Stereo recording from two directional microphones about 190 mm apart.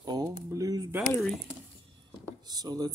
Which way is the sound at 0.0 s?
20° right (ahead or behind).